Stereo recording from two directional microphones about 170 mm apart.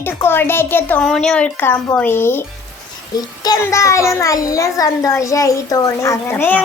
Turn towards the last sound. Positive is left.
turn(degrees=10)  # may be behind; listen again after turning